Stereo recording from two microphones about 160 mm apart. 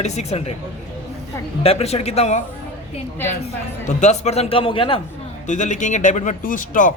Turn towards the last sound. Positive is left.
turn(degrees=55)  # may be behind; listen again after turning